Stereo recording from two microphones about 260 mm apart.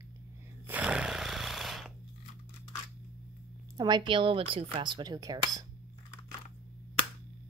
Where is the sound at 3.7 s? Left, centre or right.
Centre.